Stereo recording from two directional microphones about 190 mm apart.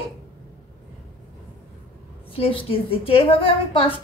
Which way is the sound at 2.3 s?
30° left (ahead or behind).